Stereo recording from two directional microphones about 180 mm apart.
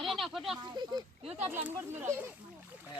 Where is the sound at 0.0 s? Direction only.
Centre (ahead or behind).